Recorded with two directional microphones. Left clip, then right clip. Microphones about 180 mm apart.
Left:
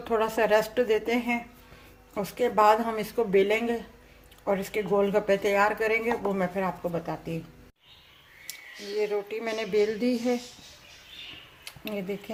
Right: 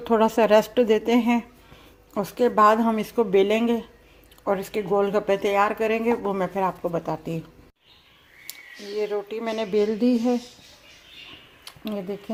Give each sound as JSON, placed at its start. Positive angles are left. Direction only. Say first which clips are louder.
{"t": 0.0, "sound": "speech", "louder": "right 6 dB", "side_deg": -40}
{"t": 9.0, "sound": "speech", "louder": "right 2 dB", "side_deg": -30}
{"t": 11.9, "sound": "speech", "louder": "right 2 dB", "side_deg": -20}